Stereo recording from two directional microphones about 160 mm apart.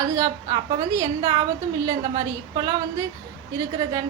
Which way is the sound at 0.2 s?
20° right (ahead or behind).